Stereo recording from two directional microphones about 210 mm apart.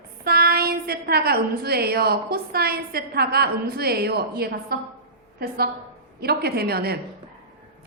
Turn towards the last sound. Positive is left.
turn(degrees=-50)  # may be behind; listen again after turning